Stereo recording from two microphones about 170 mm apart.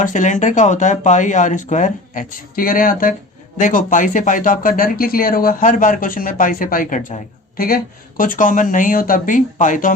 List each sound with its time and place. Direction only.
0.0 s speech: 45° left (ahead or behind)